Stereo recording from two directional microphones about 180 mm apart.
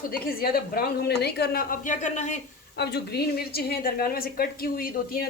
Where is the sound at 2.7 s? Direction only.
65° left (ahead or behind).